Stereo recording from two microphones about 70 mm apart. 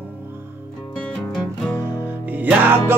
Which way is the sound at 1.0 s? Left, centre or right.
Centre.